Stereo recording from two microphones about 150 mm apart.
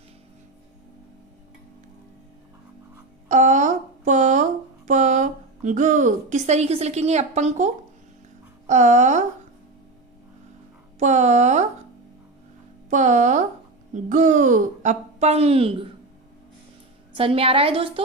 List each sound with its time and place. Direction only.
3.2 s a woman's voice: 55° right (ahead or behind)
11.0 s speech: 50° right (ahead or behind)
12.9 s speech: 55° right (ahead or behind)
17.2 s a woman's voice: 40° right (ahead or behind)